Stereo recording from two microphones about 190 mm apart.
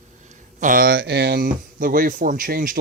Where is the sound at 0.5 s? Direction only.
45° right (ahead or behind).